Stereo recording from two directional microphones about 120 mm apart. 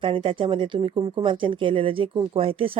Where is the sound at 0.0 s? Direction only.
50° right (ahead or behind).